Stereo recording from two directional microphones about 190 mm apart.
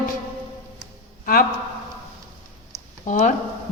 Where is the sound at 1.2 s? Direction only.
50° left (ahead or behind).